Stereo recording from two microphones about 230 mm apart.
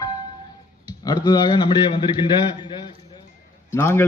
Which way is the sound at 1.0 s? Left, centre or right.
Centre.